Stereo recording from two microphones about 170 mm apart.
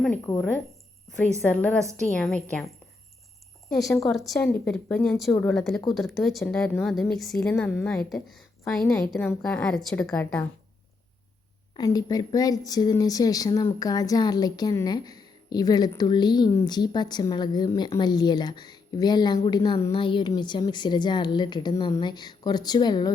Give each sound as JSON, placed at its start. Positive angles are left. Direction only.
{"t": 0.3, "sound": "speech", "side_deg": 20}
{"t": 1.4, "sound": "a woman's voice", "side_deg": 10}
{"t": 3.7, "sound": "speech", "side_deg": 0}
{"t": 4.3, "sound": "a woman's voice", "side_deg": 10}
{"t": 8.8, "sound": "a woman's voice", "side_deg": 20}
{"t": 11.8, "sound": "speech", "side_deg": 20}